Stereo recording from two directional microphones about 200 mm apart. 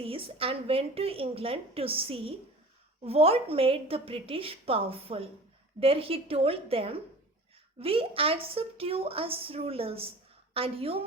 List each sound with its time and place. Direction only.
0.0 s a woman's voice: 30° right (ahead or behind)